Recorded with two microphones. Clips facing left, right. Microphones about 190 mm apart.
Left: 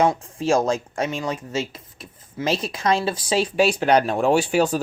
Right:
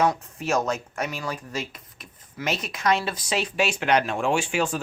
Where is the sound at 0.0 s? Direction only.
30° left (ahead or behind).